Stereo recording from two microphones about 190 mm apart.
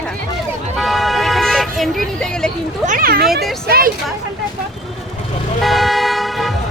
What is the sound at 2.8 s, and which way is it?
Speech, 45° right (ahead or behind).